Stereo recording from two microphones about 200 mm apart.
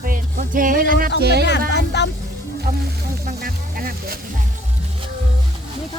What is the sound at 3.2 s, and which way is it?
Speech, 45° right (ahead or behind).